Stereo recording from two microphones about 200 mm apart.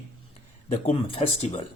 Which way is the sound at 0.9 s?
25° left (ahead or behind).